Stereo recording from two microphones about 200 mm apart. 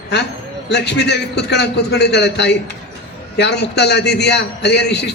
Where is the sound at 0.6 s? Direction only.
60° left (ahead or behind).